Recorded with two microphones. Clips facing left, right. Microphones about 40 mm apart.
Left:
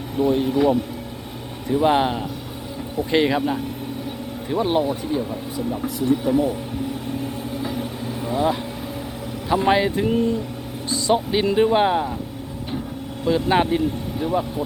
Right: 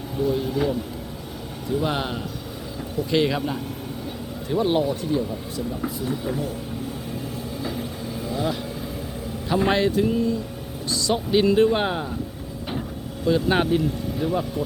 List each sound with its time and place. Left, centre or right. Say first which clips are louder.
0.2 s speech: left 4 dB; left
1.7 s speech: left 7 dB; left
6.0 s speech: left 12 dB; left
8.3 s vehicle: left 5 dB; left
9.5 s speech: left 2 dB; centre
9.9 s speech: left 1 dB; left
10.8 s vehicle: left 1 dB; left
11.1 s speech: even; centre
13.3 s speech: left 1 dB; left
13.7 s speech: left 1 dB; centre